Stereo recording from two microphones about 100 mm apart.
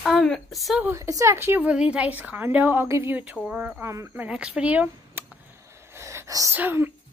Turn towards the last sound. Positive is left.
turn(degrees=-20)  # may be behind; listen again after turning